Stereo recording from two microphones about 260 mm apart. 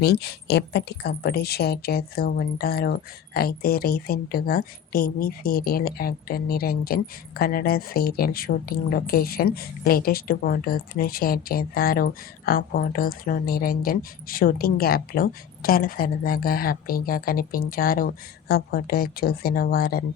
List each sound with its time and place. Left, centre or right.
0.0 s speech: left